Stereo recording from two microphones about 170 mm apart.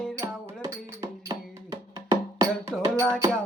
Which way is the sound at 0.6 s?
20° right (ahead or behind).